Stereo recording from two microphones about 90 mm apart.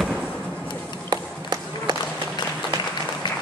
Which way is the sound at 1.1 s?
45° right (ahead or behind).